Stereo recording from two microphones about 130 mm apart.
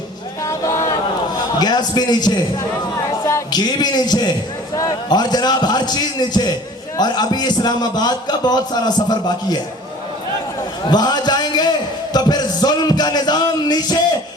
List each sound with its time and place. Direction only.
0.4 s a sound: 25° left (ahead or behind)
1.5 s a man's voice: 35° left (ahead or behind)
10.8 s a man's voice: 35° left (ahead or behind)